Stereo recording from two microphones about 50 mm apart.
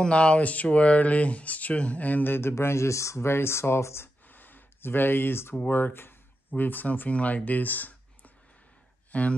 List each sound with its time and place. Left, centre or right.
0.0 s speech: left
2.5 s speech: left
3.3 s speech: left
4.3 s a sound: left
5.7 s speech: left